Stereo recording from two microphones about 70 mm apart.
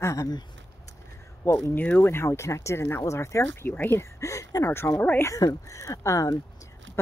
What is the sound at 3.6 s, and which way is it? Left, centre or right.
Speech, left.